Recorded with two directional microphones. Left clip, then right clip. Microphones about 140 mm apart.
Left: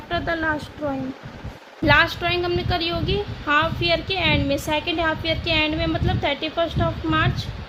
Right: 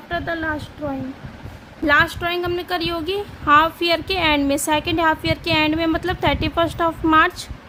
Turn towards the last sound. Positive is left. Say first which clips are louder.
# right 7 dB
turn(degrees=-40)  # may be behind; listen again after turning